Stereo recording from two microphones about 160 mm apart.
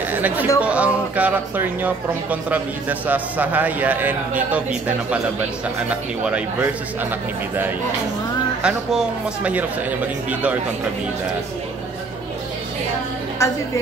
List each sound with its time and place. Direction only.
0.1 s speech: 10° right (ahead or behind)
8.6 s speech: 5° right (ahead or behind)
13.4 s a woman's voice: 20° left (ahead or behind)